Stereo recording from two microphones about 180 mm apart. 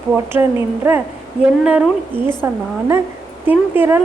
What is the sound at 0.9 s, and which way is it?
A woman's voice, 10° right (ahead or behind).